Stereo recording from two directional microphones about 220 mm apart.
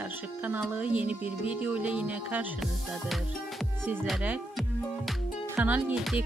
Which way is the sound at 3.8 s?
5° right (ahead or behind).